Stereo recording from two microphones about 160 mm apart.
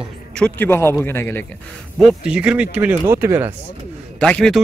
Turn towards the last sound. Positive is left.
turn(degrees=5)  # may be behind; listen again after turning